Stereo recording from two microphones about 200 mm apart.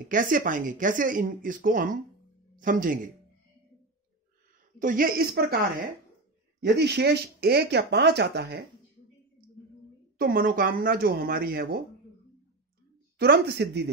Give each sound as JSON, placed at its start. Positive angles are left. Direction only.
{"t": 0.0, "sound": "speech", "side_deg": -40}
{"t": 4.7, "sound": "speech", "side_deg": -45}
{"t": 6.6, "sound": "speech", "side_deg": -55}
{"t": 10.1, "sound": "speech", "side_deg": -45}
{"t": 13.2, "sound": "speech", "side_deg": -55}